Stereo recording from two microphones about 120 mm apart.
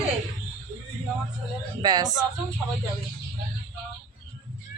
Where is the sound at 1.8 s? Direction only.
35° right (ahead or behind).